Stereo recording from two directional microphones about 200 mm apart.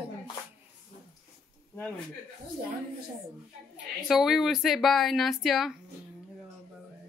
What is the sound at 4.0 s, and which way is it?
Speech, centre (ahead or behind).